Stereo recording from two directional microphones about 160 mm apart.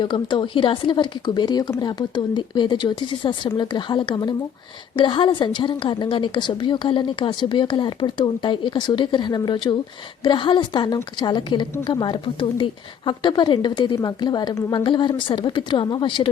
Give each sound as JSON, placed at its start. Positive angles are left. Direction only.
{"t": 0.0, "sound": "a woman's voice", "side_deg": 30}